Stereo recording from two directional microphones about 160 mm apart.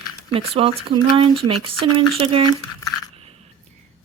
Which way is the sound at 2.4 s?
25° left (ahead or behind).